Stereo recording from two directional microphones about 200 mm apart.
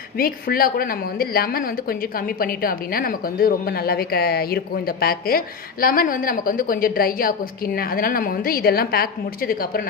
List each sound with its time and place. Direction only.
0.2 s a woman's voice: 45° left (ahead or behind)